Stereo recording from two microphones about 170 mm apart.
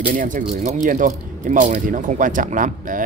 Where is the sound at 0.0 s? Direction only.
55° right (ahead or behind).